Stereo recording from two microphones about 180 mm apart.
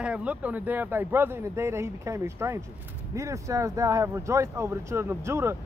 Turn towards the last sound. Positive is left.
turn(degrees=-15)  # may be behind; listen again after turning